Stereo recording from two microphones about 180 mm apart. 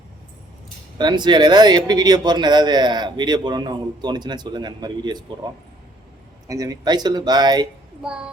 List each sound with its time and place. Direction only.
0.9 s speech: 25° right (ahead or behind)
6.5 s speech: 20° right (ahead or behind)
8.0 s child singing: 5° right (ahead or behind)